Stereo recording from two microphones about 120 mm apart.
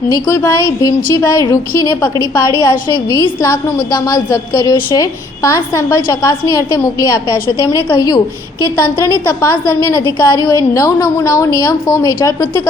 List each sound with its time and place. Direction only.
0.1 s a woman's voice: 25° left (ahead or behind)
7.9 s a woman's voice: 35° left (ahead or behind)